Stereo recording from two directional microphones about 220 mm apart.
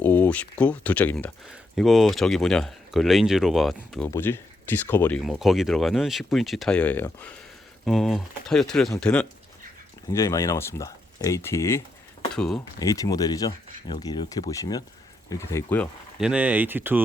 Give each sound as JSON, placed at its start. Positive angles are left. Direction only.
{"t": 0.0, "sound": "speech", "side_deg": 10}
{"t": 12.8, "sound": "speech", "side_deg": 15}